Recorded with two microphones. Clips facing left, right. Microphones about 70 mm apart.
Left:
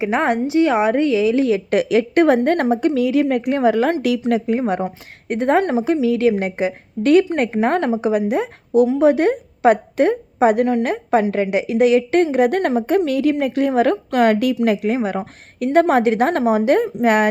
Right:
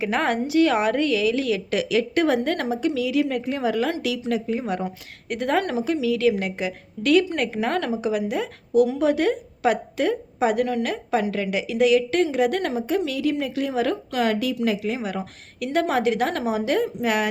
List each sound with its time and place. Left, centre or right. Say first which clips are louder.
0.0 s a woman's voice: left 5 dB; left